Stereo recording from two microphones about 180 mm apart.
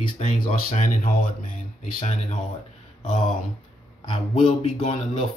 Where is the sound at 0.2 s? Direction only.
45° left (ahead or behind).